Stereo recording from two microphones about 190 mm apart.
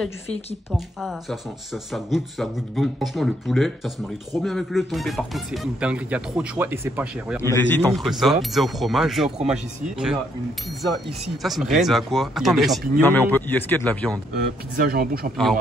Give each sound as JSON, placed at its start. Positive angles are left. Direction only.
{"t": 0.7, "sound": "speech", "side_deg": 0}
{"t": 7.4, "sound": "speech", "side_deg": 10}
{"t": 11.4, "sound": "speech", "side_deg": 0}
{"t": 13.0, "sound": "a man's voice", "side_deg": 10}
{"t": 14.3, "sound": "a man's voice", "side_deg": -50}